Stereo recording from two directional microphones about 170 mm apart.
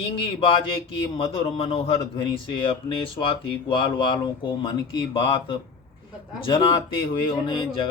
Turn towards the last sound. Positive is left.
turn(degrees=30)  # may be behind; listen again after turning